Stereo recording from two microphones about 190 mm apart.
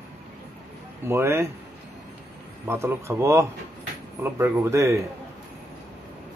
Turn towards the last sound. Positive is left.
turn(degrees=-15)  # may be behind; listen again after turning